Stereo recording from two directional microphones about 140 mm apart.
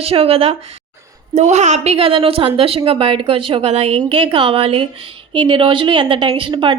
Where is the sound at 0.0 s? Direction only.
45° right (ahead or behind).